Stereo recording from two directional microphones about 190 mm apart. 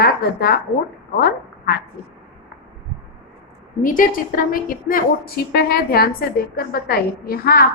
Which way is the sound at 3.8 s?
45° left (ahead or behind).